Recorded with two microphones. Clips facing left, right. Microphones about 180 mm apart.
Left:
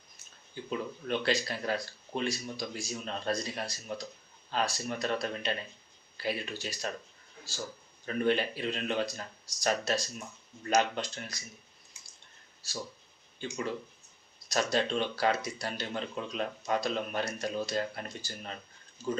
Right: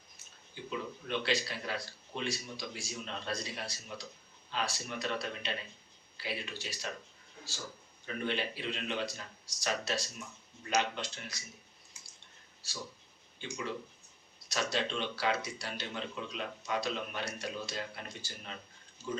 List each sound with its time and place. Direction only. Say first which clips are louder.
0.7 s speech: left 4 dB; 45° left (ahead or behind)
8.0 s speech: left 7 dB; 45° left (ahead or behind)
14.5 s speech: left 5 dB; 45° left (ahead or behind)